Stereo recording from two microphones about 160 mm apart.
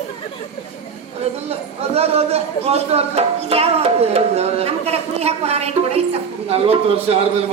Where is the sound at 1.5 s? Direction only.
40° right (ahead or behind).